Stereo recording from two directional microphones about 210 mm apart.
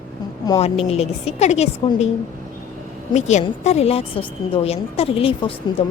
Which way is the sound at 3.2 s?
35° left (ahead or behind).